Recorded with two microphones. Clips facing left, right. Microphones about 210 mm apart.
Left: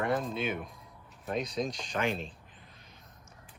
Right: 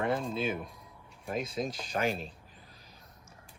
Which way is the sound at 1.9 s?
40° right (ahead or behind).